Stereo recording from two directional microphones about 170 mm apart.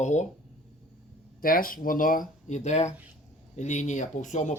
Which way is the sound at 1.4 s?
55° left (ahead or behind).